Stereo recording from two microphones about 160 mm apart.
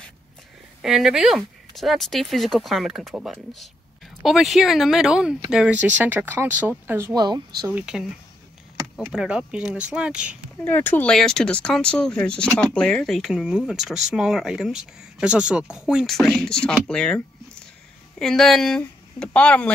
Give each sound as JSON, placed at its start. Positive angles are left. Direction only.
{"t": 0.8, "sound": "speech", "side_deg": -5}
{"t": 7.2, "sound": "speech", "side_deg": -25}
{"t": 7.6, "sound": "speech", "side_deg": -5}
{"t": 9.1, "sound": "speech", "side_deg": -5}
{"t": 10.6, "sound": "speech", "side_deg": 10}
{"t": 18.2, "sound": "speech", "side_deg": 5}